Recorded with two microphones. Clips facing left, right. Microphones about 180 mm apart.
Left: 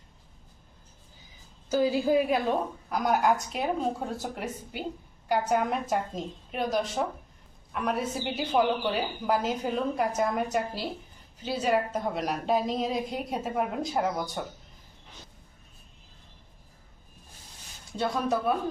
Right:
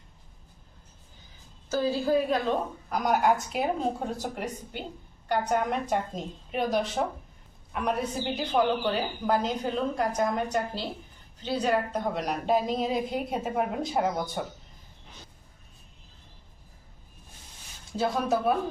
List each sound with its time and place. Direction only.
1.7 s a woman's voice: 15° left (ahead or behind)
2.9 s a woman's voice: centre (ahead or behind)
17.9 s a woman's voice: centre (ahead or behind)